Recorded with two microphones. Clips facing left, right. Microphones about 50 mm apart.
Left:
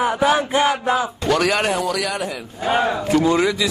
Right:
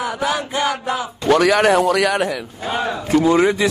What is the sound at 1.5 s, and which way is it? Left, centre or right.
Speech, right.